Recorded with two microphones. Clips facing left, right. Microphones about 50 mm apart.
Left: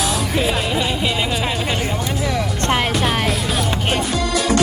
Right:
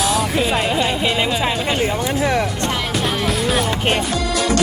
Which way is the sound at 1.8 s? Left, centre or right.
Right.